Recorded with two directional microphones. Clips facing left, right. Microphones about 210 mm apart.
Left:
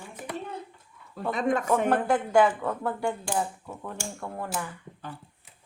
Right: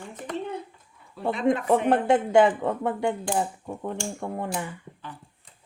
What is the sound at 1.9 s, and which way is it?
Speech, 25° right (ahead or behind).